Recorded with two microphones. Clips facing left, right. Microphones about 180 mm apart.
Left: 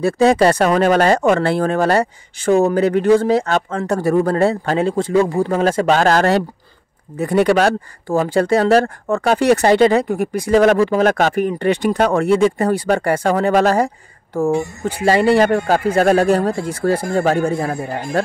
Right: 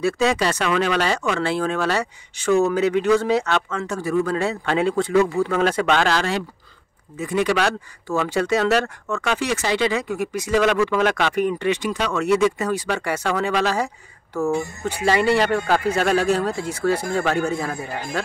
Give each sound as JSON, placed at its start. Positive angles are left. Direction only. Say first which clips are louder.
{"t": 0.0, "sound": "speech", "louder": "left 7 dB", "side_deg": 50}
{"t": 3.8, "sound": "speech", "louder": "left 8 dB", "side_deg": 65}
{"t": 4.1, "sound": "speech", "louder": "left 6 dB", "side_deg": 50}
{"t": 7.5, "sound": "speech", "louder": "left 6 dB", "side_deg": 45}